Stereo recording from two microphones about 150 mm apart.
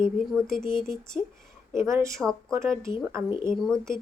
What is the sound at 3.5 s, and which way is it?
Speech, 5° left (ahead or behind).